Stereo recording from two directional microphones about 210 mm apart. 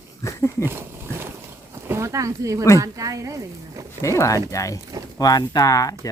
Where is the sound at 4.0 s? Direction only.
15° left (ahead or behind).